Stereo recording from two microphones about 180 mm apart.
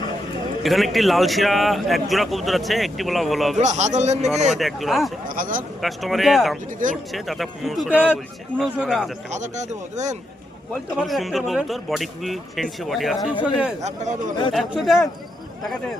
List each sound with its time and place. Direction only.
0.6 s speech: centre (ahead or behind)
3.6 s speech: 40° right (ahead or behind)
4.5 s speech: centre (ahead or behind)
5.3 s speech: 50° right (ahead or behind)
5.8 s speech: centre (ahead or behind)
9.3 s speech: 40° right (ahead or behind)
10.9 s speech: centre (ahead or behind)
13.8 s speech: 45° right (ahead or behind)
14.5 s speech: centre (ahead or behind)